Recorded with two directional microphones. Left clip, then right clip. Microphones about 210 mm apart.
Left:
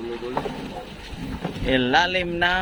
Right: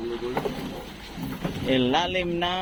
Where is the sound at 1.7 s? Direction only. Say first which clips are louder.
Left 4 dB; 15° left (ahead or behind).